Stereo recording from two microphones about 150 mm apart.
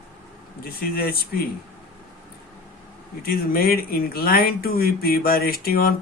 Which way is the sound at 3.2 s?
90° left.